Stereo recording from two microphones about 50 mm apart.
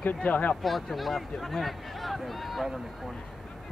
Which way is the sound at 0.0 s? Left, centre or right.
Left.